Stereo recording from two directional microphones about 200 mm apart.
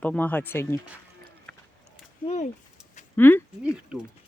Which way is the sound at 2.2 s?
35° left (ahead or behind).